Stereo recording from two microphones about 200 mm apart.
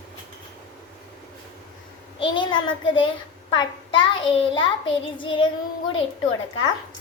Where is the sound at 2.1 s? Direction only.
25° left (ahead or behind).